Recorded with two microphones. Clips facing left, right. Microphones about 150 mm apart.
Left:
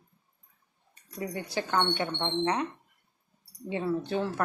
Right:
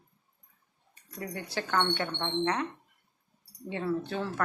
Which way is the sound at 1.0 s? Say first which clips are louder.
Left 3 dB; 15° left (ahead or behind).